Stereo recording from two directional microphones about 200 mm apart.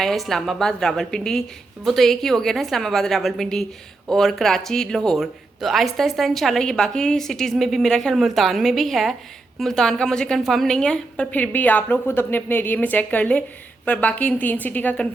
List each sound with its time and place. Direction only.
0.0 s a woman's voice: centre (ahead or behind)